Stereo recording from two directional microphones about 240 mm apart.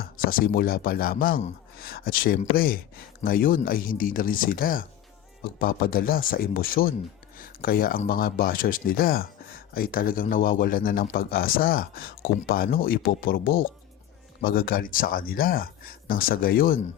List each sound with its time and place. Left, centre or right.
0.0 s speech: left